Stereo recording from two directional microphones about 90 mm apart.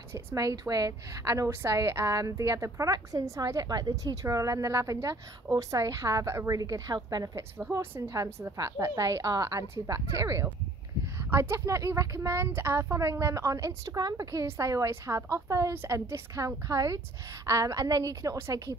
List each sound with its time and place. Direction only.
0.1 s a woman's voice: 35° right (ahead or behind)
7.8 s a woman's voice: 25° right (ahead or behind)